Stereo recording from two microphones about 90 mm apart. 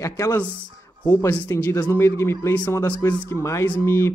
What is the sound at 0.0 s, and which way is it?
Speech, 35° left (ahead or behind).